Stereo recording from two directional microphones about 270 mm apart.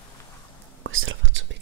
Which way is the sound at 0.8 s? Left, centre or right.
Right.